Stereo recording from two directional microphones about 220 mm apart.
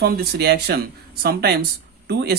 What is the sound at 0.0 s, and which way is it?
Speech, 45° right (ahead or behind).